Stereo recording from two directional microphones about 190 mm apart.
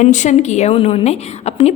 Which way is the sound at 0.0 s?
40° left (ahead or behind).